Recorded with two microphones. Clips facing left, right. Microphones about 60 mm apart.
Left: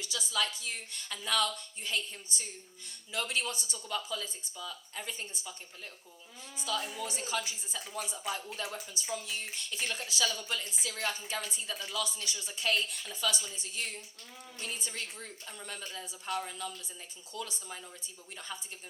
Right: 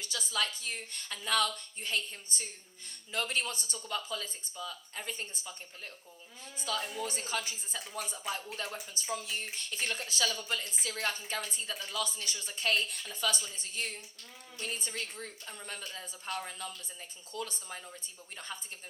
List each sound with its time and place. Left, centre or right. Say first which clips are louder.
0.0 s speech: left 1 dB; right